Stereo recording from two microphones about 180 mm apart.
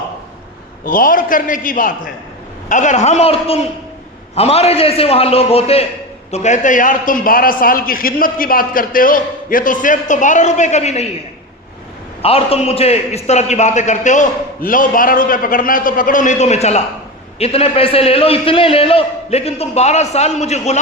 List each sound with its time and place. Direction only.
0.9 s a man's voice: 50° left (ahead or behind)
12.2 s a man's voice: 35° left (ahead or behind)